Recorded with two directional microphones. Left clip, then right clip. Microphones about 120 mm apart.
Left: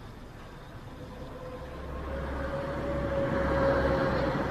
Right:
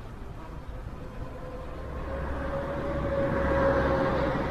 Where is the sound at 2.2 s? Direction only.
15° left (ahead or behind).